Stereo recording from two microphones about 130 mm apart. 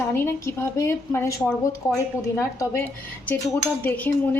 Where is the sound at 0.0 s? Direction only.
20° left (ahead or behind).